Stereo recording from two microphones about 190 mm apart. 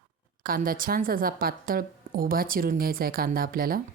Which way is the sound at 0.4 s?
50° right (ahead or behind).